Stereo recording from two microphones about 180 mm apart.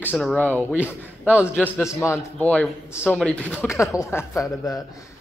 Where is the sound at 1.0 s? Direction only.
10° right (ahead or behind).